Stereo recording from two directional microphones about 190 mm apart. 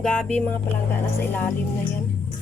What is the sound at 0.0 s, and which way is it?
Speech, 5° left (ahead or behind).